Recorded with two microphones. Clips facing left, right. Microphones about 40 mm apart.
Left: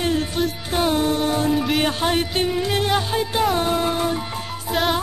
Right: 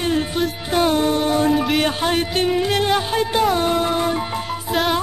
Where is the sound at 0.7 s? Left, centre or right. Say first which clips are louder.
Right 3 dB; centre.